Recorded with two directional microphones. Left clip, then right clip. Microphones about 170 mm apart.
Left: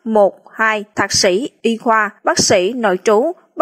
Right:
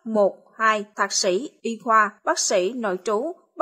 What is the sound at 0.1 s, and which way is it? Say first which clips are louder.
A woman's voice: left 8 dB; 45° left (ahead or behind).